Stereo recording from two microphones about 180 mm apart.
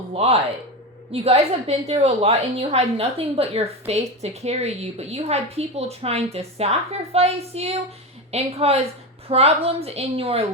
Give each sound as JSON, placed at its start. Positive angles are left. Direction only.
{"t": 0.1, "sound": "a woman's voice", "side_deg": -35}